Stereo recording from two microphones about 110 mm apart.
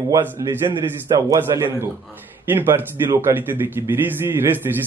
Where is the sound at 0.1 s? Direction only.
25° right (ahead or behind).